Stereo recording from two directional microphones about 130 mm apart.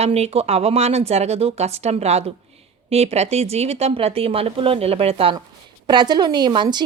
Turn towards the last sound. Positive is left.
turn(degrees=-35)  # may be behind; listen again after turning